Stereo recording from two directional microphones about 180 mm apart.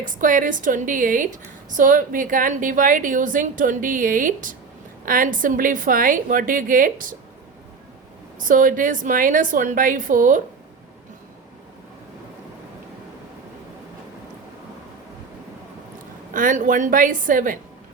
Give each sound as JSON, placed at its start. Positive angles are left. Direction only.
{"t": 0.0, "sound": "a woman's voice", "side_deg": -45}
{"t": 8.4, "sound": "a woman's voice", "side_deg": -45}
{"t": 16.3, "sound": "a woman's voice", "side_deg": -45}